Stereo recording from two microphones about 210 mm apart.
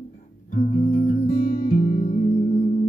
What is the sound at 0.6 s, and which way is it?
Music, 30° left (ahead or behind).